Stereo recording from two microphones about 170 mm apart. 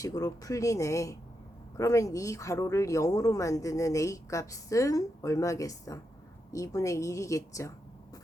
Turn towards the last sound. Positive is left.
turn(degrees=20)  # may be behind; listen again after turning